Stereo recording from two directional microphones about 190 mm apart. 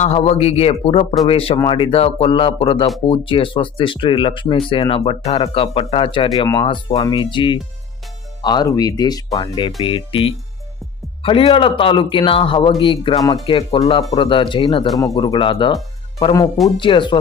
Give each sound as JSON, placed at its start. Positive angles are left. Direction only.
{"t": 0.0, "sound": "speech", "side_deg": 35}